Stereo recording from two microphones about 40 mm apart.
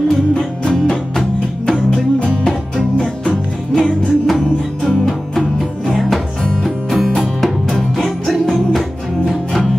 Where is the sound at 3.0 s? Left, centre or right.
Centre.